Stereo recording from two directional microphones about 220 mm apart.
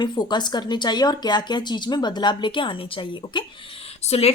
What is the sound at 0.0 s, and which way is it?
A woman's voice, 20° left (ahead or behind).